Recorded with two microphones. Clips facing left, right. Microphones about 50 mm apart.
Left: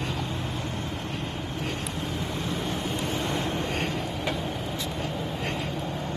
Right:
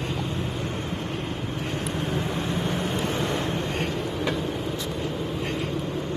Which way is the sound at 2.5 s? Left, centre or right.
Centre.